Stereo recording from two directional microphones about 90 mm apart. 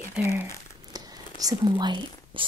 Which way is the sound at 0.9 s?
50° right (ahead or behind).